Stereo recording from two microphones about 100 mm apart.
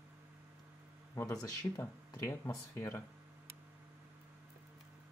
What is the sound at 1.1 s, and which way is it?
Speech, 35° left (ahead or behind).